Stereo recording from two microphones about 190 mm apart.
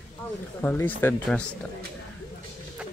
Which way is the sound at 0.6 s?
10° left (ahead or behind).